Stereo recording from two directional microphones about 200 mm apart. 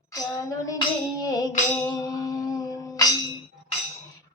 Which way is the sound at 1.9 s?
20° left (ahead or behind).